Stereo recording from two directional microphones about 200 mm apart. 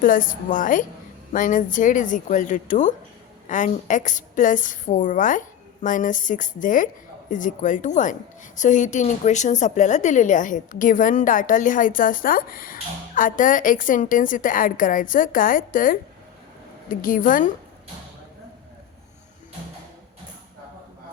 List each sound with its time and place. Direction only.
0.0 s a woman's voice: 40° left (ahead or behind)